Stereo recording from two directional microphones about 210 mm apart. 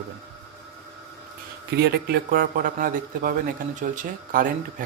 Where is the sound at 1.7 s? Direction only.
50° right (ahead or behind).